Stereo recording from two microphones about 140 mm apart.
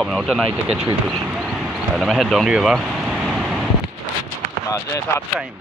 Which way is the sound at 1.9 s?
Centre (ahead or behind).